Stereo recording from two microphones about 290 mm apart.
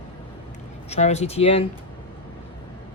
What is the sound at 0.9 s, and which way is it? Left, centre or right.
Speech, left.